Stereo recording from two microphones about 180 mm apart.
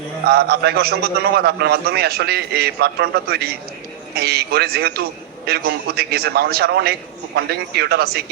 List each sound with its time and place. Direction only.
0.3 s a man's voice: 60° right (ahead or behind)